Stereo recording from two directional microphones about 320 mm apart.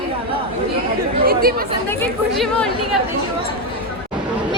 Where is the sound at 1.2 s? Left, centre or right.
Right.